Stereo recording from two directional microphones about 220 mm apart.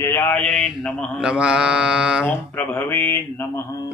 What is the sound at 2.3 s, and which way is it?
Speech, 10° left (ahead or behind).